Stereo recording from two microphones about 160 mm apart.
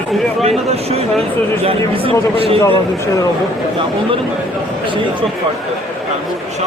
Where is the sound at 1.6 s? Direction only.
35° right (ahead or behind).